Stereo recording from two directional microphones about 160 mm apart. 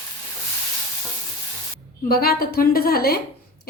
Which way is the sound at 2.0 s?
75° left (ahead or behind).